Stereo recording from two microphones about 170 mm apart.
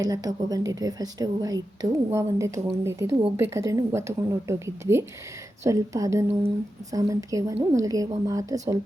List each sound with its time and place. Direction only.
0.0 s a woman's voice: 20° right (ahead or behind)